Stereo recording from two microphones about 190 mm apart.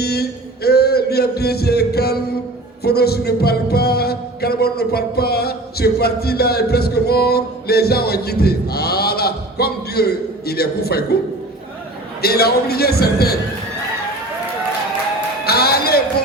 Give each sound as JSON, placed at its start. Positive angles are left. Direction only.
{"t": 0.0, "sound": "music", "side_deg": 55}
{"t": 12.2, "sound": "music", "side_deg": 55}
{"t": 15.4, "sound": "a sound", "side_deg": 55}